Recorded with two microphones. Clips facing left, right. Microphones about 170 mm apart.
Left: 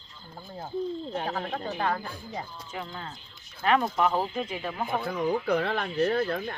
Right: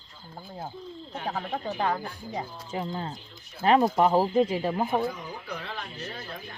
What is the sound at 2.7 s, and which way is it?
Speech, 30° right (ahead or behind).